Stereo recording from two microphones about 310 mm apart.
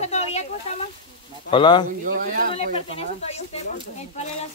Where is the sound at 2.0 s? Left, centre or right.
Right.